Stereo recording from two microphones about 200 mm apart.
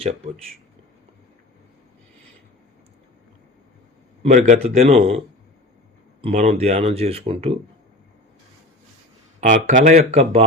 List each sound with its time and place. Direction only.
4.2 s speech: 35° right (ahead or behind)
4.9 s speech: 30° right (ahead or behind)
6.2 s speech: 30° right (ahead or behind)
9.4 s speech: 40° right (ahead or behind)